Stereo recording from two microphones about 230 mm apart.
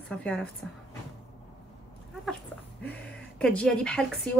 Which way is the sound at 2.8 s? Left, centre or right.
Centre.